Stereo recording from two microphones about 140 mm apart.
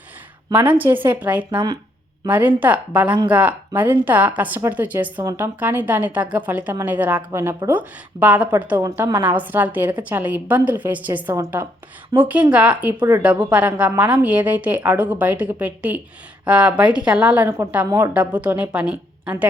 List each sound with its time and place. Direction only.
0.7 s a woman's voice: 15° right (ahead or behind)
1.5 s speech: 30° right (ahead or behind)
2.2 s a woman's voice: 10° right (ahead or behind)
8.8 s a woman's voice: 25° right (ahead or behind)